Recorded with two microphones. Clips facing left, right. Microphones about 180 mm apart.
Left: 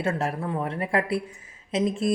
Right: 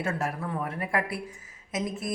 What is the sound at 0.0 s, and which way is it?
Speech, 30° left (ahead or behind).